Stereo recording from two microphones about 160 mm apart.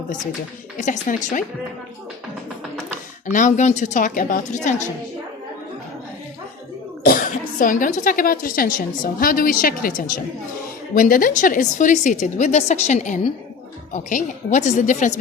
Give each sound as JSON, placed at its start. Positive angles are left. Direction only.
{"t": 0.8, "sound": "a woman's voice", "side_deg": 50}
{"t": 3.3, "sound": "a woman's voice", "side_deg": 50}
{"t": 7.0, "sound": "a woman's voice", "side_deg": 60}